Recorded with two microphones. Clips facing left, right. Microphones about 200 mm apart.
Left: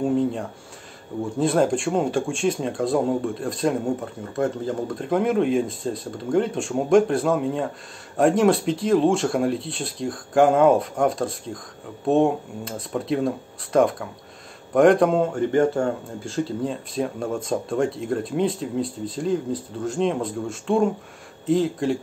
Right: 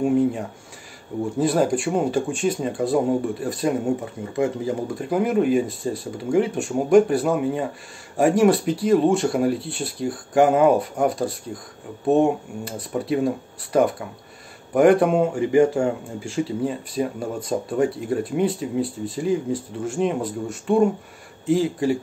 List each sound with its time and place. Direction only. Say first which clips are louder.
0.0 s a man's voice: right 2 dB; 10° right (ahead or behind)